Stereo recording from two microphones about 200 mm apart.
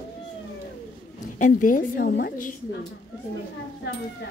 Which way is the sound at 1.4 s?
40° left (ahead or behind).